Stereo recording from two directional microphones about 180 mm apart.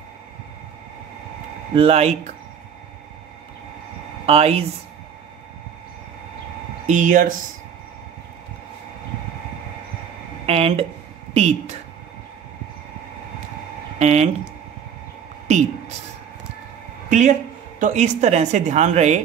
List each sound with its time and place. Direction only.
1.7 s speech: 35° right (ahead or behind)
4.3 s speech: 35° right (ahead or behind)
6.9 s speech: 45° right (ahead or behind)
10.4 s speech: 35° right (ahead or behind)
13.9 s speech: 40° right (ahead or behind)
17.1 s speech: 45° right (ahead or behind)